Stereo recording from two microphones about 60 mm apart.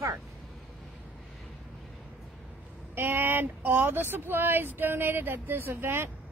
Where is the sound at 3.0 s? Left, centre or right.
Right.